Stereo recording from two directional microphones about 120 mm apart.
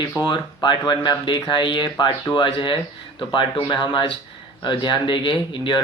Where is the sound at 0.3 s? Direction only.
40° left (ahead or behind).